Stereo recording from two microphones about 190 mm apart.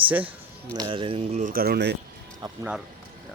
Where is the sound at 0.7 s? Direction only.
25° right (ahead or behind); by 1.9 s 60° right (ahead or behind).